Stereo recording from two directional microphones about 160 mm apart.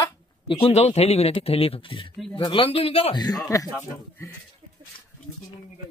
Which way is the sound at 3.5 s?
20° left (ahead or behind).